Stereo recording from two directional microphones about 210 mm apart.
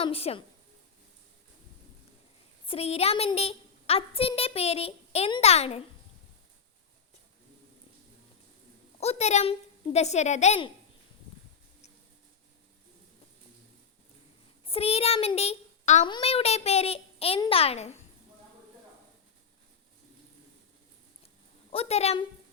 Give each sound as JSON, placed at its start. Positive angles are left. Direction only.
{"t": 0.0, "sound": "a woman's voice", "side_deg": 25}
{"t": 2.6, "sound": "a woman's voice", "side_deg": 30}
{"t": 9.0, "sound": "a woman's voice", "side_deg": 30}
{"t": 14.6, "sound": "a child's voice", "side_deg": 25}
{"t": 21.7, "sound": "a woman's voice", "side_deg": 30}